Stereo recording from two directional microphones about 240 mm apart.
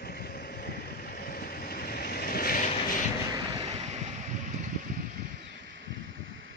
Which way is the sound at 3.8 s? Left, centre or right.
Right.